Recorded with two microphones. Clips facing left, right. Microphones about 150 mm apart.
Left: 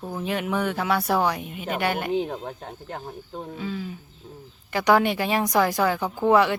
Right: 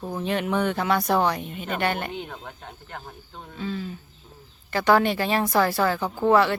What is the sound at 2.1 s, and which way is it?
Speech, 35° left (ahead or behind).